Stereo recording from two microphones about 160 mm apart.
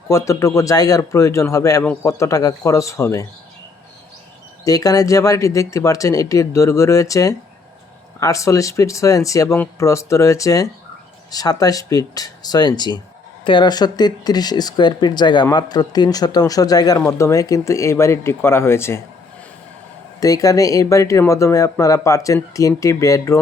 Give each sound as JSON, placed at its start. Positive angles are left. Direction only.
{"t": 0.1, "sound": "speech", "side_deg": 20}
{"t": 4.6, "sound": "speech", "side_deg": 20}
{"t": 20.1, "sound": "speech", "side_deg": 20}